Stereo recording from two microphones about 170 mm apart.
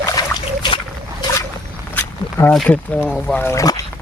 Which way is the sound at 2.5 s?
5° left (ahead or behind).